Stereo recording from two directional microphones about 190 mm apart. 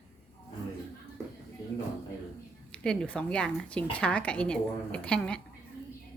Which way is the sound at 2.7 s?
5° left (ahead or behind).